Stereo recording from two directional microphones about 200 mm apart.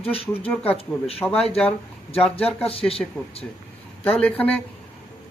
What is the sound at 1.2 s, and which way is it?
Speech, 10° left (ahead or behind).